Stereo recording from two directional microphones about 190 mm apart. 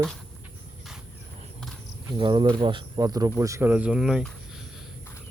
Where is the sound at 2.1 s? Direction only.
25° right (ahead or behind); by 4.3 s centre (ahead or behind).